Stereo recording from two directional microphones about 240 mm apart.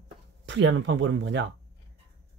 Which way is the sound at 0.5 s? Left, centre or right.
Right.